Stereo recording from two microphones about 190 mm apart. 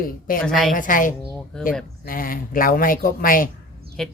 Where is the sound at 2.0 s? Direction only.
50° left (ahead or behind).